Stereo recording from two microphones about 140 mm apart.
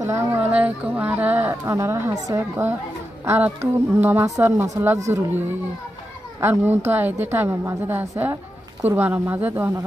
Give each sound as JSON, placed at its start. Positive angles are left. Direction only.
{"t": 0.0, "sound": "a woman's voice", "side_deg": -15}
{"t": 6.4, "sound": "a woman's voice", "side_deg": -15}